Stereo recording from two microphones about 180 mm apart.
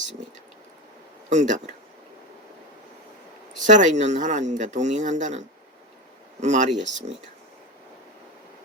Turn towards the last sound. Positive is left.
turn(degrees=-40)  # may be behind; listen again after turning